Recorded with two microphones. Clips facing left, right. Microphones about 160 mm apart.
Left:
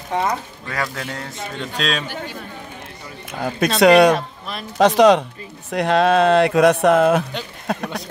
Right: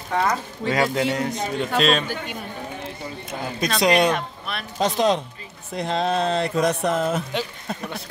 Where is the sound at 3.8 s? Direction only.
70° left (ahead or behind).